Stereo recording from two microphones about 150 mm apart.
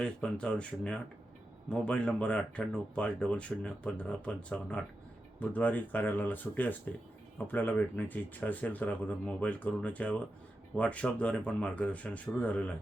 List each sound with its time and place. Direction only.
0.0 s speech: 5° left (ahead or behind)